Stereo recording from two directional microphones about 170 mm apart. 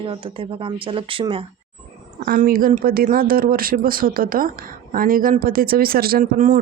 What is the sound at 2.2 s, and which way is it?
Speech, 55° right (ahead or behind).